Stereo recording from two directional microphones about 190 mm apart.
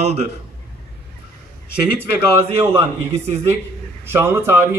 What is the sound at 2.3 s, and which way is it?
Speech, 15° right (ahead or behind).